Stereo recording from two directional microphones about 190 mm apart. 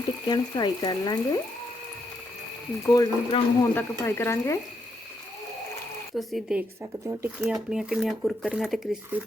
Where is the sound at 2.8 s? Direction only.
20° left (ahead or behind).